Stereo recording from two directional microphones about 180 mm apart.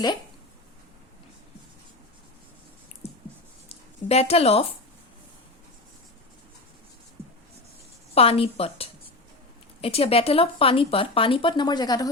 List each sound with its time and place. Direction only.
3.7 s a woman's voice: 35° left (ahead or behind)
8.1 s speech: 35° left (ahead or behind)